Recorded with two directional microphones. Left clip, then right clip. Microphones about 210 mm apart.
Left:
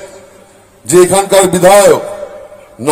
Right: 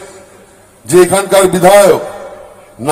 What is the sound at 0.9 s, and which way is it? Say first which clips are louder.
Speech: left 1 dB; 50° left (ahead or behind).